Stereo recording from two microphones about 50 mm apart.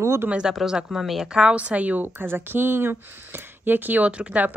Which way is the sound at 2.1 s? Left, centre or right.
Right.